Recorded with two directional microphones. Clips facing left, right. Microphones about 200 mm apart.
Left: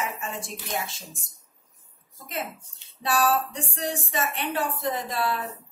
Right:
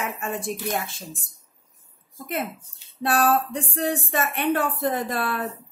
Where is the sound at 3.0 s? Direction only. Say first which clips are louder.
Right 3 dB; 55° right (ahead or behind).